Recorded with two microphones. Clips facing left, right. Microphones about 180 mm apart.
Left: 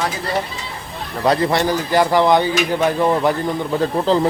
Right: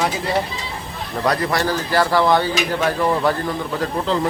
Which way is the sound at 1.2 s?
25° left (ahead or behind).